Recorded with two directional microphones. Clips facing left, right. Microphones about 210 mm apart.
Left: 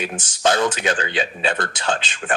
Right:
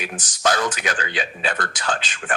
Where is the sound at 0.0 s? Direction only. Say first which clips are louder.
Left 3 dB; 25° left (ahead or behind).